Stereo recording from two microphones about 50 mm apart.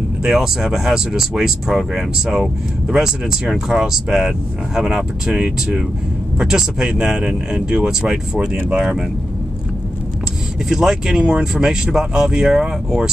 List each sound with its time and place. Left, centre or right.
0.2 s speech: centre
10.7 s speech: centre